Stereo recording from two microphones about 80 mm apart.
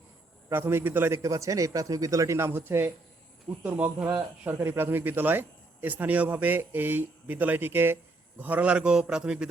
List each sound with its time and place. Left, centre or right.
0.5 s a man's voice: right
1.2 s a man's voice: right; by 9.5 s centre